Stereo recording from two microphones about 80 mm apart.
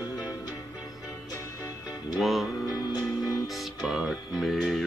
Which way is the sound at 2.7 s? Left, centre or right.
Left.